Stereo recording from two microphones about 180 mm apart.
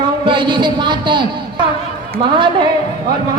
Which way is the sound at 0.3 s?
25° right (ahead or behind).